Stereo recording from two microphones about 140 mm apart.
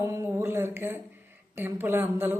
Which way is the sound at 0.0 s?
20° right (ahead or behind).